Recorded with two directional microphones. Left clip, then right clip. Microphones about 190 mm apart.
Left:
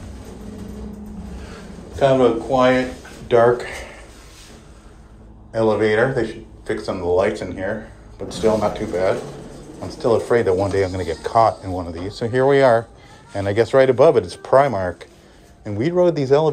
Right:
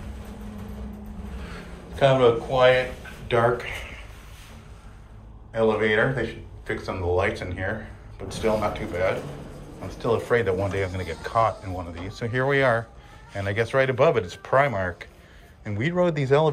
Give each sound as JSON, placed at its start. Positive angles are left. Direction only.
{"t": 1.5, "sound": "a man's voice", "side_deg": 20}
{"t": 5.5, "sound": "speech", "side_deg": 30}